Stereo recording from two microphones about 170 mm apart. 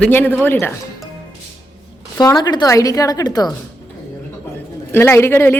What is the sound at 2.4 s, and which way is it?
A woman's voice, 25° left (ahead or behind).